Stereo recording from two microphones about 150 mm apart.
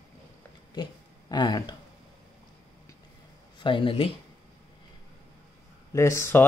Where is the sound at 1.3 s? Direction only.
30° left (ahead or behind).